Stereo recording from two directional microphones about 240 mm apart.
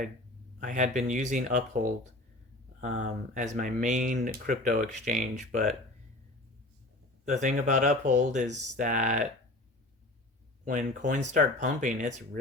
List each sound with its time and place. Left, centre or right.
0.6 s speech: right
2.8 s speech: right
7.4 s speech: right
10.7 s speech: right